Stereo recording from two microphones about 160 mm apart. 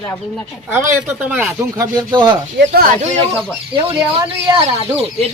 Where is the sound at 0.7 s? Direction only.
15° right (ahead or behind).